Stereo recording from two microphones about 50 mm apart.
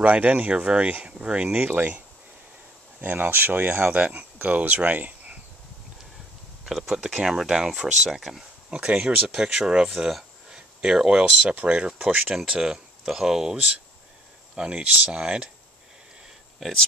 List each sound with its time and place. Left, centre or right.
0.0 s speech: right
1.6 s speech: right
3.9 s speech: right
6.6 s speech: centre
8.7 s speech: centre
10.5 s speech: centre
11.4 s speech: right
12.4 s speech: centre
14.5 s speech: right
16.5 s speech: centre